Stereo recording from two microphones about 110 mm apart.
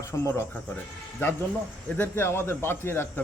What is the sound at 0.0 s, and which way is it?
Speech, 25° left (ahead or behind).